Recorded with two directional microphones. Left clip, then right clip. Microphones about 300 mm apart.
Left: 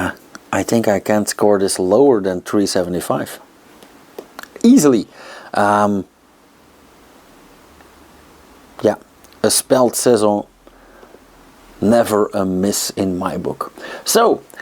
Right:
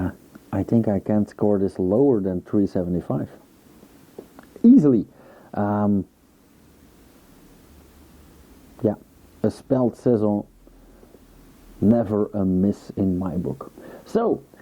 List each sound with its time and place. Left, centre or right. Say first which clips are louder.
0.0 s speech: left 9 dB; centre
1.8 s speech: left 7 dB; left
2.0 s speech: left 7 dB; centre
8.7 s a sound: left 8 dB; centre
9.4 s speech: left 9 dB; centre
11.9 s speech: left 9 dB; centre